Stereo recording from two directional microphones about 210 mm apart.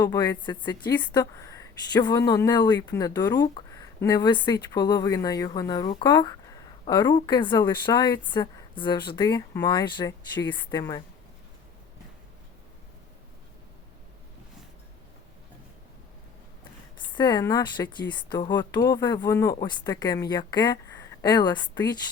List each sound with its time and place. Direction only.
0.0 s a woman's voice: 20° left (ahead or behind)
17.0 s a woman's voice: 20° left (ahead or behind)